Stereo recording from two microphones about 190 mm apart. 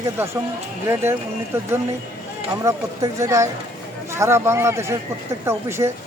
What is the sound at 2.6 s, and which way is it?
Speech, 15° right (ahead or behind).